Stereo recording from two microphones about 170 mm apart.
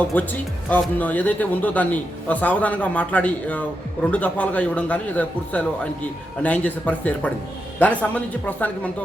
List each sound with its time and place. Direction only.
0.1 s speech: 10° left (ahead or behind)